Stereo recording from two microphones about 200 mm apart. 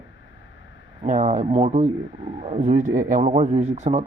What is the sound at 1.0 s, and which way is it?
Speech, 35° right (ahead or behind).